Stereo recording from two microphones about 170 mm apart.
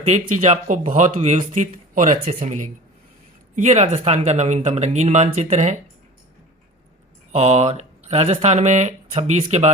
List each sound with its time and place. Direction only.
0.0 s speech: 40° right (ahead or behind)
7.3 s speech: 40° right (ahead or behind)
9.1 s speech: 30° right (ahead or behind)
9.5 s speech: 40° right (ahead or behind)